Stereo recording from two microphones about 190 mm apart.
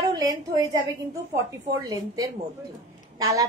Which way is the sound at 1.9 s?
20° right (ahead or behind).